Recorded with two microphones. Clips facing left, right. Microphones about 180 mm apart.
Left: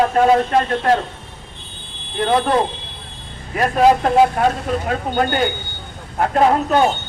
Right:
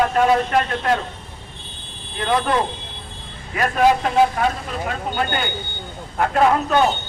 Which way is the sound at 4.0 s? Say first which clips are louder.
Left 3 dB; 45° left (ahead or behind).